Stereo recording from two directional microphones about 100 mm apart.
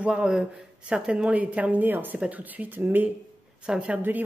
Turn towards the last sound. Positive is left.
turn(degrees=-15)  # may be behind; listen again after turning